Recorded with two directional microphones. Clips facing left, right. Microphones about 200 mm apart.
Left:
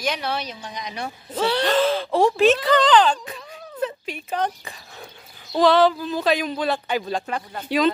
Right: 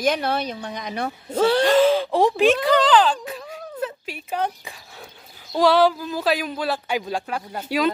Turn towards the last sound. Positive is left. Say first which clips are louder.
# left 1 dB
turn(degrees=-10)  # may be behind; listen again after turning